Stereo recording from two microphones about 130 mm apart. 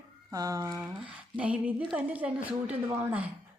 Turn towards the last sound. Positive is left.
turn(degrees=-10)  # may be behind; listen again after turning